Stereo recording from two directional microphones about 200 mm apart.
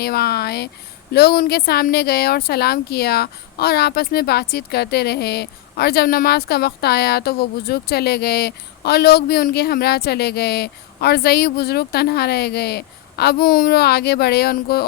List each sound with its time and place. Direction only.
0.0 s speech: 50° left (ahead or behind)